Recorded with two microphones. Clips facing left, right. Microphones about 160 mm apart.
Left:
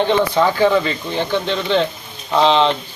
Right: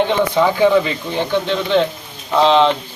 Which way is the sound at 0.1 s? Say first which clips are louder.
Even; 10° right (ahead or behind).